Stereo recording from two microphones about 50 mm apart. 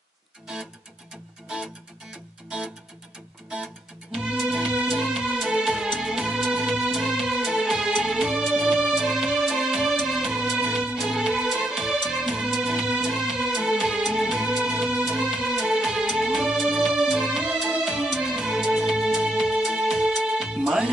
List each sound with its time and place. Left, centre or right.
1.5 s music: centre
10.6 s music: right
11.0 s music: centre